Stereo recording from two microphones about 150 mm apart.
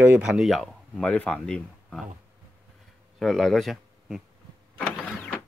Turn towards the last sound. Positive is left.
turn(degrees=10)  # may be behind; listen again after turning